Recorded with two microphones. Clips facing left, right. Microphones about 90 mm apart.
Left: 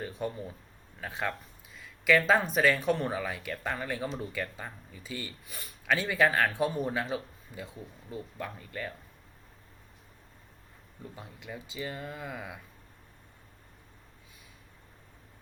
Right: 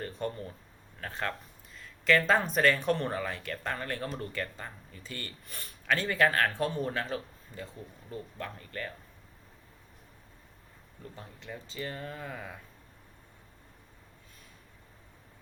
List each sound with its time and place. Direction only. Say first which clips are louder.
0.0 s speech: even; 5° left (ahead or behind)
11.0 s speech: left 1 dB; 10° left (ahead or behind)